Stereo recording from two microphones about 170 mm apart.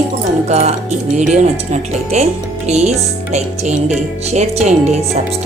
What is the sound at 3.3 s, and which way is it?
Music, 45° right (ahead or behind).